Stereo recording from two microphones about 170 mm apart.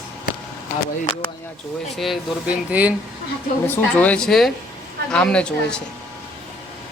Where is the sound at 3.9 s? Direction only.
5° left (ahead or behind).